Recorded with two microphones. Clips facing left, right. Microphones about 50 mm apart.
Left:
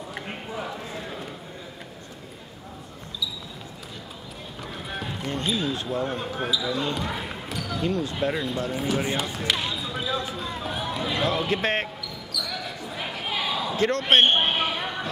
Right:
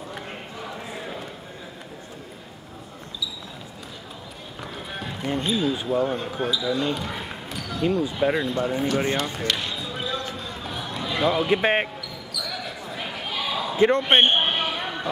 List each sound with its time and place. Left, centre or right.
0.7 s a sound: centre
4.6 s run: centre
5.2 s speech: centre
8.8 s basketball bounce: centre
11.2 s speech: centre
12.4 s basketball bounce: centre
13.7 s speech: centre